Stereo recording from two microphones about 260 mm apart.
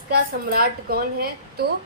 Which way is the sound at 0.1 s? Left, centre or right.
Right.